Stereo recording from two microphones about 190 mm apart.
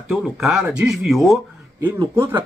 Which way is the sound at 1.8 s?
20° right (ahead or behind).